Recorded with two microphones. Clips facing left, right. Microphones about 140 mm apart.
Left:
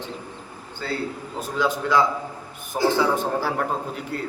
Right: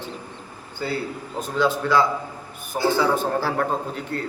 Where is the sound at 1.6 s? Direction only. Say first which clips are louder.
Right 1 dB; 20° left (ahead or behind).